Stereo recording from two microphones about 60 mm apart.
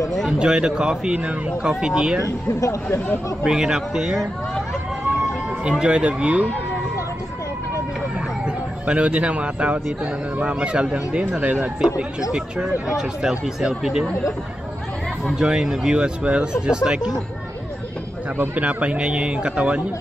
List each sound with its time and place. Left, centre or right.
0.3 s speech: centre
2.2 s speech: left
3.4 s speech: centre
5.7 s a man's voice: centre
8.5 s speech: centre
12.8 s speech: centre
15.3 s speech: centre
18.4 s a man's voice: right